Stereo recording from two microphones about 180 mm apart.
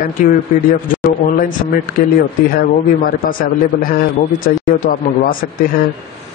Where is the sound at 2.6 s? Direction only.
55° left (ahead or behind).